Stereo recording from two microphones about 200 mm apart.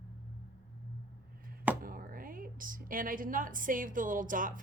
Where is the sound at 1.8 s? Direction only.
45° right (ahead or behind).